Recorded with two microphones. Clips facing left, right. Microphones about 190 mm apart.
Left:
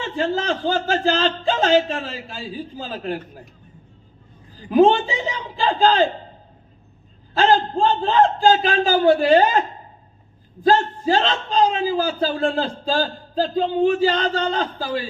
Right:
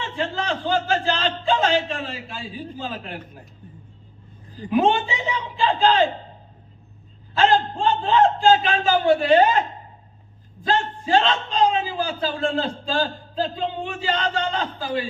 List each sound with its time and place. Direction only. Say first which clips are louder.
0.0 s a man's voice: left 4 dB; 40° left (ahead or behind)
4.7 s a man's voice: left 5 dB; 35° left (ahead or behind)
7.3 s a man's voice: left 2 dB; 35° left (ahead or behind)